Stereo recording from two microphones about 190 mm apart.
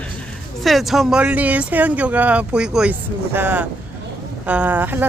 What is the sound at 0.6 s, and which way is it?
Speech, centre (ahead or behind).